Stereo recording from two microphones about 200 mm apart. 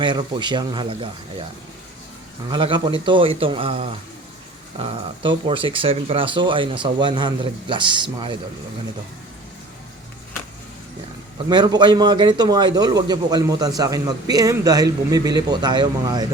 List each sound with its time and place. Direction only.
0.0 s a man's voice: 25° right (ahead or behind)
2.5 s a man's voice: 25° right (ahead or behind)
5.5 s a man's voice: 25° right (ahead or behind)
11.4 s a man's voice: 20° right (ahead or behind)